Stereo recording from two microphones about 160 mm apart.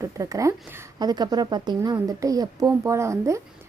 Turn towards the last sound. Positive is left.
turn(degrees=-20)  # may be behind; listen again after turning